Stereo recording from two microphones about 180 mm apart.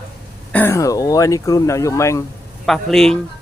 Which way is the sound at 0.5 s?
15° left (ahead or behind).